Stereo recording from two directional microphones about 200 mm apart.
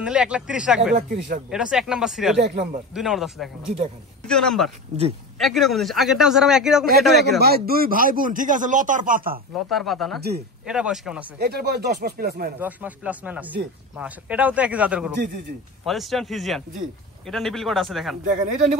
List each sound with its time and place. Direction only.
0.0 s a man's voice: 5° right (ahead or behind)
7.2 s a man's voice: 50° right (ahead or behind)
9.7 s a man's voice: centre (ahead or behind)
11.3 s a man's voice: 55° right (ahead or behind)
12.5 s a man's voice: 10° right (ahead or behind)
18.2 s speech: 40° right (ahead or behind)